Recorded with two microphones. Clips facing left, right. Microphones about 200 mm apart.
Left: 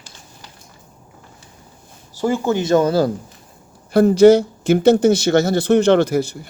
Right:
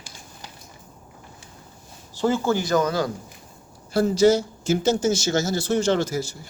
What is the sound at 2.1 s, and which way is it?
Speech, 10° left (ahead or behind).